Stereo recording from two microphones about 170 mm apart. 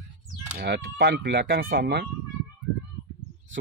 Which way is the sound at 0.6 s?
75° right (ahead or behind).